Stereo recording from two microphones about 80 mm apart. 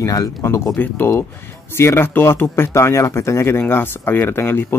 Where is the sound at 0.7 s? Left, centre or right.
Left.